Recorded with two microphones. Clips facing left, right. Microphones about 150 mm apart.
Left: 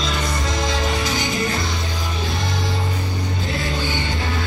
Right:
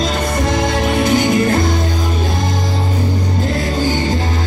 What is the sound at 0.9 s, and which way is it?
Music, 55° right (ahead or behind).